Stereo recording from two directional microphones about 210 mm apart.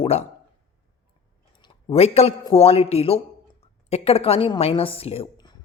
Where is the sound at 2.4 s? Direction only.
25° left (ahead or behind).